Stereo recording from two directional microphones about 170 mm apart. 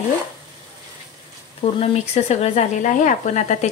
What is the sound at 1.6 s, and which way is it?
Speech, 35° left (ahead or behind).